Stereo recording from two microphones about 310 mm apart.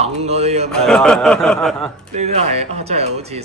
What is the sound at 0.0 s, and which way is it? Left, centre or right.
Speech, centre.